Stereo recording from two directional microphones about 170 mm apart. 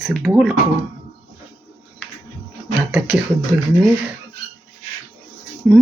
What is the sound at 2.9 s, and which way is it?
Speech, 10° right (ahead or behind).